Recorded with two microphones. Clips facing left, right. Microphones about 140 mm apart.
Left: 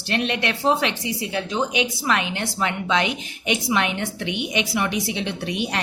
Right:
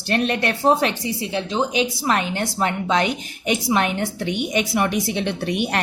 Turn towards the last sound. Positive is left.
turn(degrees=-55)  # may be behind; listen again after turning